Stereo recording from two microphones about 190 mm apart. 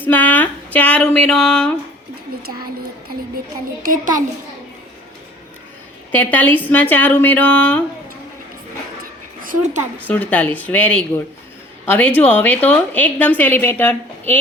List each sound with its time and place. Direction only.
0.0 s a woman's voice: 10° left (ahead or behind)
3.8 s a child's voice: 45° right (ahead or behind)
6.1 s a woman's voice: 10° left (ahead or behind)
9.4 s a woman's voice: 45° right (ahead or behind)
10.1 s a woman's voice: 5° left (ahead or behind)